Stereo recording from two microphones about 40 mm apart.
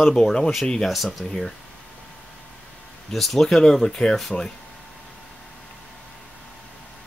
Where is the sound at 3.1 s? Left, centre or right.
Centre.